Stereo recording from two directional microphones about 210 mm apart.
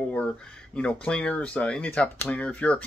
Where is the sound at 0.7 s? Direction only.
5° left (ahead or behind).